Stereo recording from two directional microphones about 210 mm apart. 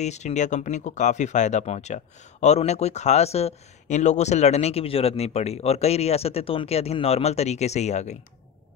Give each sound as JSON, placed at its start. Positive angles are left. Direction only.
{"t": 0.0, "sound": "speech", "side_deg": 30}